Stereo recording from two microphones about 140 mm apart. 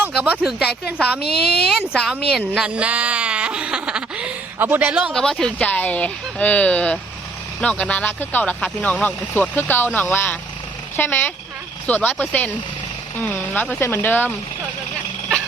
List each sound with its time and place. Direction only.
0.0 s speech: 10° right (ahead or behind)
5.1 s speech: 5° left (ahead or behind)
13.6 s speech: 15° left (ahead or behind)